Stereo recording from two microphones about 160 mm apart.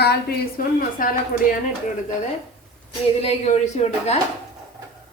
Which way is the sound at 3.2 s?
40° left (ahead or behind).